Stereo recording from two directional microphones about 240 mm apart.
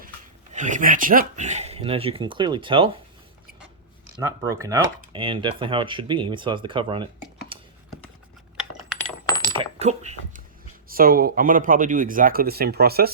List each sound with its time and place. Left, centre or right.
0.5 s speech: right
4.2 s speech: centre
9.2 s coin: centre
9.6 s speech: right